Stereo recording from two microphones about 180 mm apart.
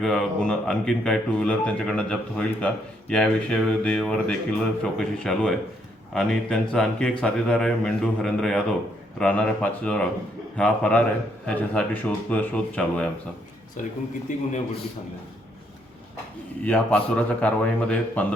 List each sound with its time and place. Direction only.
0.0 s a man's voice: 5° left (ahead or behind)
13.8 s speech: 45° left (ahead or behind)
16.6 s speech: 5° left (ahead or behind)